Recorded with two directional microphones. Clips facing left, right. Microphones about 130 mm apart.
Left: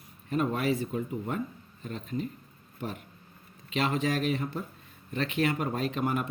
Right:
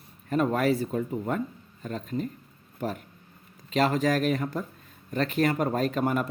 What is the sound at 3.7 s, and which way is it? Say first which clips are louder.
Speech: right 5 dB; 40° right (ahead or behind).